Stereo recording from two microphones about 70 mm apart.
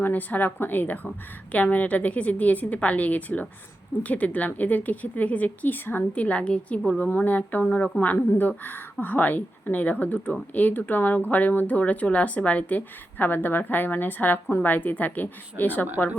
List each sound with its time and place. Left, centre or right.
0.0 s speech: left